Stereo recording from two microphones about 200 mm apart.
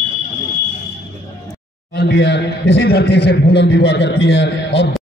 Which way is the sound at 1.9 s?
55° left (ahead or behind).